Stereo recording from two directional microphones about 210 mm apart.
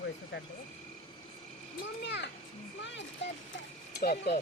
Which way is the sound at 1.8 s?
55° left (ahead or behind).